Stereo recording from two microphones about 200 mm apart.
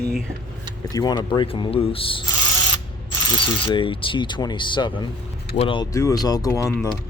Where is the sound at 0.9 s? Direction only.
20° left (ahead or behind).